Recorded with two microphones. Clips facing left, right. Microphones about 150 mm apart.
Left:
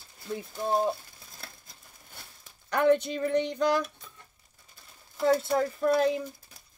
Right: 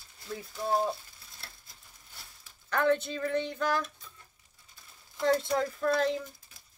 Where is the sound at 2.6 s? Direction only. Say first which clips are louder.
Left 4 dB; 15° left (ahead or behind).